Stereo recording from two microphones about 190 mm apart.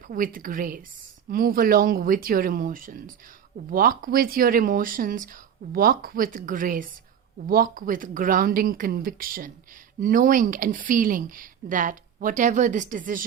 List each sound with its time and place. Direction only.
0.1 s speech: 45° right (ahead or behind)